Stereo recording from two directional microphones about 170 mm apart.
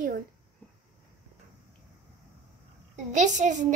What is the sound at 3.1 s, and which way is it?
Speech, 45° right (ahead or behind).